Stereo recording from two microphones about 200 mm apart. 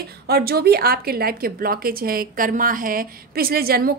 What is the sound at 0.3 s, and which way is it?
A woman's voice, 50° right (ahead or behind).